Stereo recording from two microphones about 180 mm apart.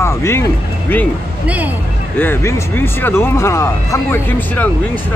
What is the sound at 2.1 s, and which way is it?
Speech, 10° left (ahead or behind).